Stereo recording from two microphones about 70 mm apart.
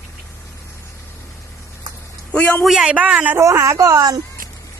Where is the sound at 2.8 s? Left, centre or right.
Right.